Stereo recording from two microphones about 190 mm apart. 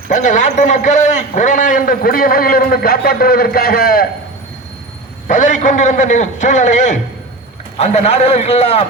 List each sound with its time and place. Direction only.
0.1 s a man's voice: 40° left (ahead or behind)
5.3 s a man's voice: 40° left (ahead or behind)